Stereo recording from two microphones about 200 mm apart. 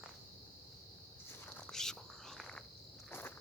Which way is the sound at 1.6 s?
Centre (ahead or behind).